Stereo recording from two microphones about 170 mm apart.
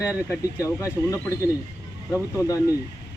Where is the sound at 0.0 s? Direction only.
10° right (ahead or behind).